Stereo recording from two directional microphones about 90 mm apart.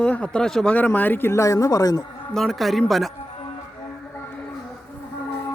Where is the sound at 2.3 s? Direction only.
5° left (ahead or behind).